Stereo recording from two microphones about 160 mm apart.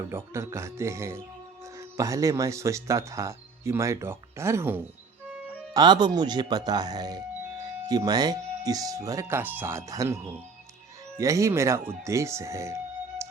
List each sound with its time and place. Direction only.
0.1 s speech: 15° right (ahead or behind)
5.7 s speech: 25° right (ahead or behind)
11.2 s speech: 20° right (ahead or behind)